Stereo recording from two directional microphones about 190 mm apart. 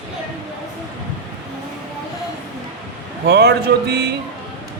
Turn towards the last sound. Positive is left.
turn(degrees=-60)  # may be behind; listen again after turning